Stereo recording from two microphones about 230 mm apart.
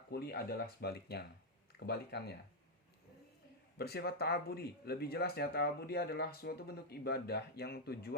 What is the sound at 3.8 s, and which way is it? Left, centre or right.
Speech, left.